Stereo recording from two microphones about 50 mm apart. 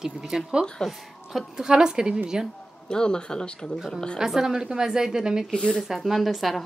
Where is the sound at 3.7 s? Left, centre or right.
Centre.